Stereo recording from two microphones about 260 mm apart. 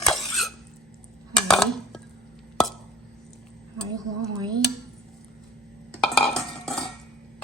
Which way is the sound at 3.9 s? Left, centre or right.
Centre.